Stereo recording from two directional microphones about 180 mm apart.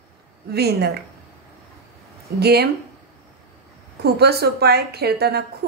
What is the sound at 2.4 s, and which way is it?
Speech, 65° right (ahead or behind).